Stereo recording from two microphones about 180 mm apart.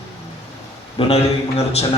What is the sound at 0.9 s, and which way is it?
Speech, 35° left (ahead or behind).